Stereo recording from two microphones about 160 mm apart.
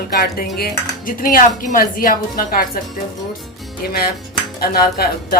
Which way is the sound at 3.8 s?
75° left (ahead or behind).